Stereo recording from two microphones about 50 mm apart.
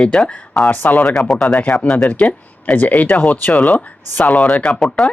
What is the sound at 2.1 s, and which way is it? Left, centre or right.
Speech, left.